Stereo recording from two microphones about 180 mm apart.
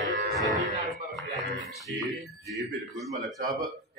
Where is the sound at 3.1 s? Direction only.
Centre (ahead or behind).